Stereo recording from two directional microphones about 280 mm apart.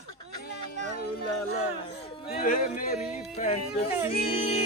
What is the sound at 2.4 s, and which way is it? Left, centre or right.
Speech, left.